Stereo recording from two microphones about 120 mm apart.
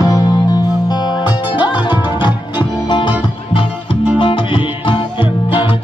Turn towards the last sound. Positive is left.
turn(degrees=45)  # may be behind; listen again after turning